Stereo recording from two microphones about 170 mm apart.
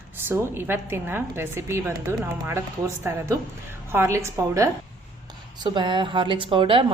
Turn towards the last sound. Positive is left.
turn(degrees=-30)  # may be behind; listen again after turning